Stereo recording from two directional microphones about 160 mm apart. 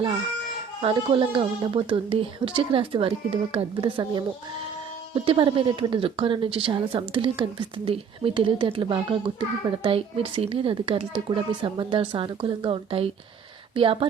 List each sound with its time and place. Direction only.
0.8 s speech: 35° right (ahead or behind)